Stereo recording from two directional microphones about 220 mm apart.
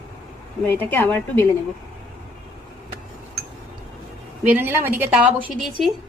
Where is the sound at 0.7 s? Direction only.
10° left (ahead or behind).